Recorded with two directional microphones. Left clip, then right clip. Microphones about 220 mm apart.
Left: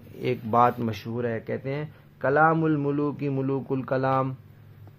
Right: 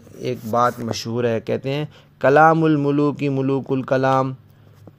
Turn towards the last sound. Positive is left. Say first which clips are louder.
# right 7 dB
turn(degrees=-25)  # may be behind; listen again after turning